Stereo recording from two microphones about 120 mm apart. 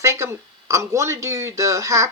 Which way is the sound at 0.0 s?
25° right (ahead or behind).